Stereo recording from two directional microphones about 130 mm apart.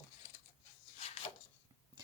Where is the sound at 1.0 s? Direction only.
50° left (ahead or behind).